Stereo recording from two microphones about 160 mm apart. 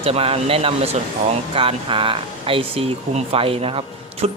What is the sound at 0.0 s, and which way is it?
Speech, 35° right (ahead or behind).